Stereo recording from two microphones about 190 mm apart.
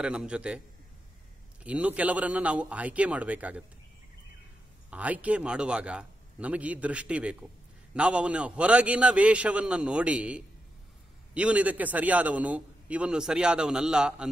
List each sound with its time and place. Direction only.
0.0 s a man's voice: 5° right (ahead or behind)
1.6 s a man's voice: 5° right (ahead or behind)
4.9 s a man's voice: 10° right (ahead or behind)